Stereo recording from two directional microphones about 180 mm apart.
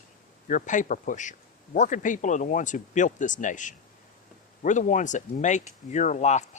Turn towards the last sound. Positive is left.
turn(degrees=40)  # may be behind; listen again after turning